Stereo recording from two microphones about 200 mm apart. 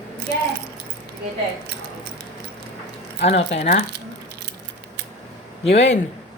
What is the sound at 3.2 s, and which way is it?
Speech, 35° left (ahead or behind).